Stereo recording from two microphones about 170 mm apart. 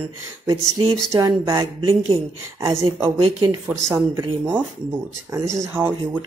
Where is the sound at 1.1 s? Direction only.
20° right (ahead or behind).